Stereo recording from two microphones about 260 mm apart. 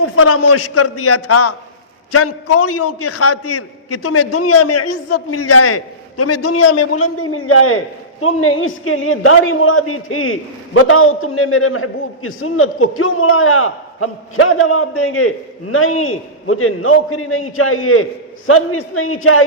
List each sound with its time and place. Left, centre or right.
0.0 s a man's voice: left